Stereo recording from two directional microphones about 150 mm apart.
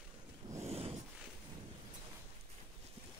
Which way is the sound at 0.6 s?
40° right (ahead or behind).